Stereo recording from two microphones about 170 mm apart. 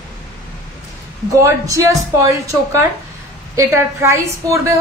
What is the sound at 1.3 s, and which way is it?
A woman's voice, 15° right (ahead or behind).